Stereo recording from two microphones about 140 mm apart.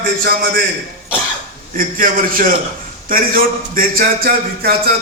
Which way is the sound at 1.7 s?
85° right.